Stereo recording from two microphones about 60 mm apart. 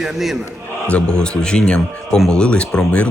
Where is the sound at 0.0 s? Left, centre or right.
Centre.